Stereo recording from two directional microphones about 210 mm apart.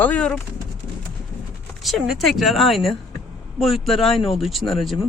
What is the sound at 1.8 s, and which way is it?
Speech, centre (ahead or behind).